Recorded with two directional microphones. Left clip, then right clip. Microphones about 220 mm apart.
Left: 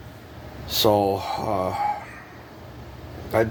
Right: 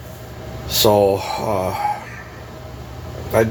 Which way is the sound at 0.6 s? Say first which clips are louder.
Right 5 dB; 45° left (ahead or behind).